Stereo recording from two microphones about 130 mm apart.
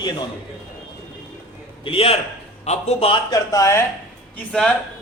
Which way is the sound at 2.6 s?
55° left (ahead or behind).